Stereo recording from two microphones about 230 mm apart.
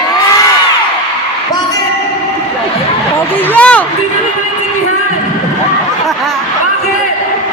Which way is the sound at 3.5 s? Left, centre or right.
Centre.